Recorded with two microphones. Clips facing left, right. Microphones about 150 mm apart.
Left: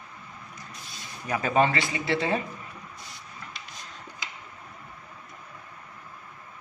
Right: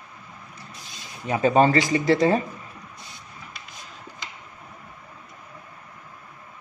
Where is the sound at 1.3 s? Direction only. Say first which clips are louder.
Right 5 dB; 30° right (ahead or behind).